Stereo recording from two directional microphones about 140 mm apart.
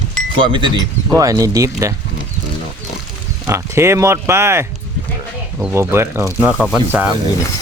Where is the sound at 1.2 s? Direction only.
25° right (ahead or behind).